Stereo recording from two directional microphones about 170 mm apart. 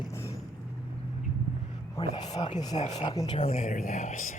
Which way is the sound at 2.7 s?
40° left (ahead or behind).